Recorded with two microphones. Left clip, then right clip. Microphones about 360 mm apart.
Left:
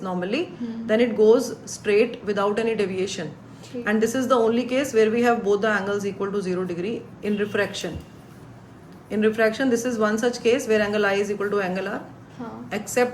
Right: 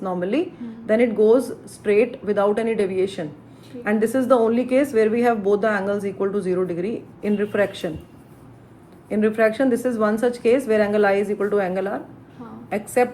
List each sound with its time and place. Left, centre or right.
0.0 s speech: centre
9.0 s speech: centre